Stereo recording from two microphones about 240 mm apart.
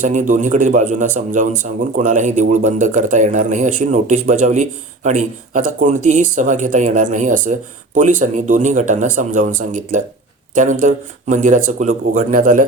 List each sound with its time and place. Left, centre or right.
0.0 s speech: right